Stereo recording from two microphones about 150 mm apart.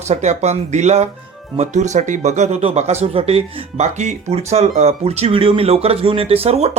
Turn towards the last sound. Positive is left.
turn(degrees=-40)  # may be behind; listen again after turning